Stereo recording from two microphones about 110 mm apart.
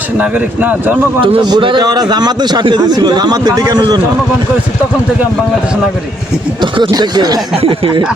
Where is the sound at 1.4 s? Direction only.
45° right (ahead or behind).